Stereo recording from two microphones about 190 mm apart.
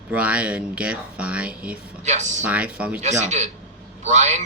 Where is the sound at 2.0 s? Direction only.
40° right (ahead or behind).